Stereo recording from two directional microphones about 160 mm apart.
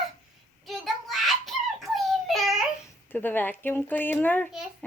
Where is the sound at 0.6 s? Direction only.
Centre (ahead or behind).